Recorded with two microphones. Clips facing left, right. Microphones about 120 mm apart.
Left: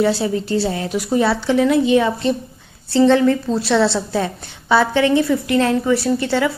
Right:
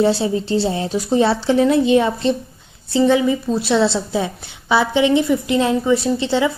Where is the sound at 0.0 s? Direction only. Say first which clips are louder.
Right 1 dB; 25° right (ahead or behind).